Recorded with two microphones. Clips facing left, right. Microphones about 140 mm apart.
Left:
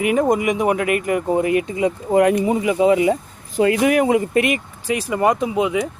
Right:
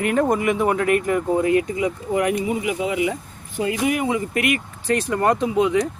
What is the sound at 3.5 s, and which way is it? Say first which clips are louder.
Speech: left 6 dB; 70° left (ahead or behind).